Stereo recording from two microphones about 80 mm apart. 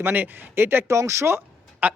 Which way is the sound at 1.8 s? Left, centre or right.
Centre.